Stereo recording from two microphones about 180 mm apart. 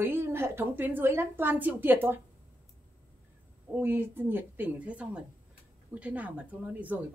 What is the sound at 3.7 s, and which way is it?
Speech, 10° right (ahead or behind).